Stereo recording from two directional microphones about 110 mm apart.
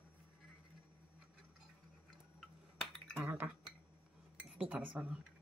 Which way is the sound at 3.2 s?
20° right (ahead or behind).